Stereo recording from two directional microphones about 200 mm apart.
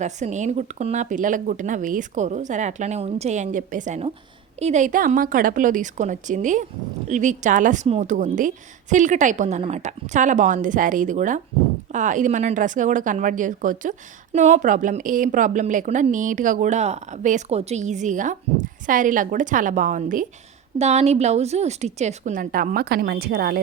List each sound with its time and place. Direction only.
0.0 s speech: 35° right (ahead or behind)